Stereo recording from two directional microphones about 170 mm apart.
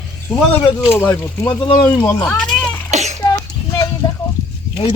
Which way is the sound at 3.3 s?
20° left (ahead or behind).